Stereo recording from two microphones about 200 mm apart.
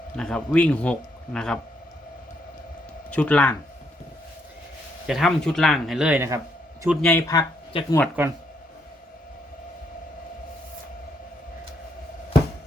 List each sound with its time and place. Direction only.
0.2 s speech: 5° left (ahead or behind)
3.1 s speech: 5° left (ahead or behind)
5.0 s speech: centre (ahead or behind)
7.1 s speech: 15° left (ahead or behind)
8.2 s speech: 10° right (ahead or behind)